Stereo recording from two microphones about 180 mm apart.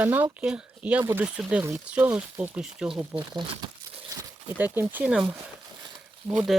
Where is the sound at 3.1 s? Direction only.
25° right (ahead or behind).